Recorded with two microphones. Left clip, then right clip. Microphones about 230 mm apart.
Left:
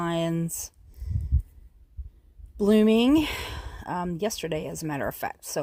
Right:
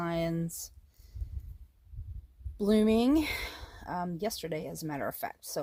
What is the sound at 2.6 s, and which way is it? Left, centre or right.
Speech, left.